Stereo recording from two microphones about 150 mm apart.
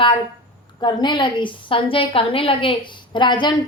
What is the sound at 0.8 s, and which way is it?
A woman's voice, 30° left (ahead or behind).